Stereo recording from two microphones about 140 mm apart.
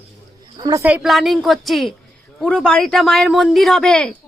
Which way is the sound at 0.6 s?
25° right (ahead or behind).